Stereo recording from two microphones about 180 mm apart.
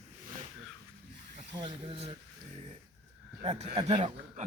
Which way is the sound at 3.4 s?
35° right (ahead or behind).